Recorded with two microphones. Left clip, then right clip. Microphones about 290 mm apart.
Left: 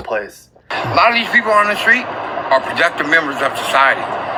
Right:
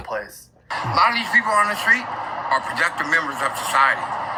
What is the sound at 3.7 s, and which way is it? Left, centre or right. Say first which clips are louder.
Speech: left 4 dB; centre.